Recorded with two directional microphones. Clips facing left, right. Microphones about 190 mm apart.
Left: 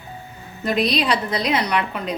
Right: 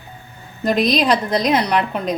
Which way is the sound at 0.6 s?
45° right (ahead or behind).